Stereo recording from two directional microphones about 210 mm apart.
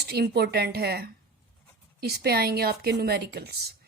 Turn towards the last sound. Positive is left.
turn(degrees=-50)  # may be behind; listen again after turning